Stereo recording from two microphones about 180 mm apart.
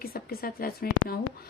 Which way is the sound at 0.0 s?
55° left (ahead or behind).